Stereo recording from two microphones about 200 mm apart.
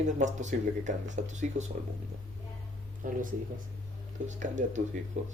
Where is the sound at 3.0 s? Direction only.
45° right (ahead or behind).